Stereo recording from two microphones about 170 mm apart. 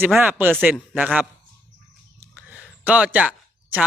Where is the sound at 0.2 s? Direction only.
10° right (ahead or behind).